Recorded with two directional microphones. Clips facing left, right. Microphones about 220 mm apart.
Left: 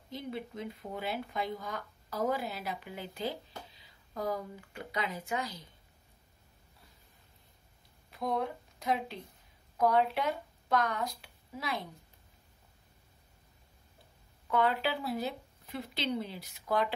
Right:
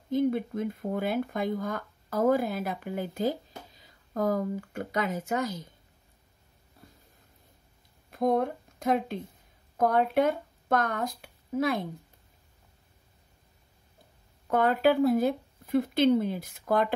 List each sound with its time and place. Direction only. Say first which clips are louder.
0.1 s speech: right 13 dB; 50° right (ahead or behind)
8.1 s speech: right 8 dB; 50° right (ahead or behind)
14.5 s speech: right 7 dB; 45° right (ahead or behind)